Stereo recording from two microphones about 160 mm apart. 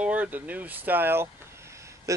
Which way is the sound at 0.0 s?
10° right (ahead or behind).